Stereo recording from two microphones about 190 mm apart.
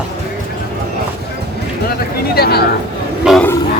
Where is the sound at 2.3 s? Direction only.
55° left (ahead or behind).